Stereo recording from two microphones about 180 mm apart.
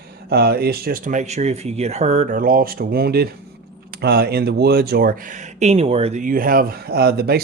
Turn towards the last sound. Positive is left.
turn(degrees=-60)  # may be behind; listen again after turning